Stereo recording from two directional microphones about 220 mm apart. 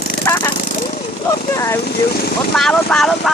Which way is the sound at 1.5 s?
10° left (ahead or behind).